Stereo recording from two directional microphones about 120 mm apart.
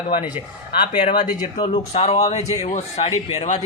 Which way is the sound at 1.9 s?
60° left (ahead or behind).